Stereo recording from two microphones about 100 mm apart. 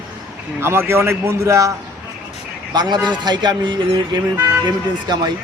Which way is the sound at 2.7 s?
45° right (ahead or behind).